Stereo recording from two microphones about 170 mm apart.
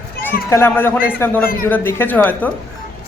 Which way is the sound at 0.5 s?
15° left (ahead or behind).